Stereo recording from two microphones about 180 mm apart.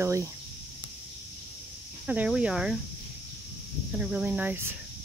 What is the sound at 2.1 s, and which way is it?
Speech, 10° right (ahead or behind).